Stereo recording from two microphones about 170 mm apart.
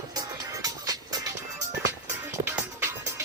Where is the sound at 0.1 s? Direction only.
20° right (ahead or behind).